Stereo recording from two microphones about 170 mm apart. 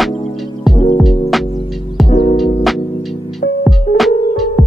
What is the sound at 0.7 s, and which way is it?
Music, centre (ahead or behind).